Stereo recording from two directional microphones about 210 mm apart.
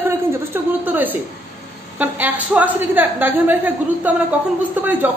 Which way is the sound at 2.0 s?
10° right (ahead or behind).